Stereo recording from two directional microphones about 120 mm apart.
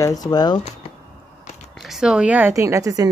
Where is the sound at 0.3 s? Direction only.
35° left (ahead or behind).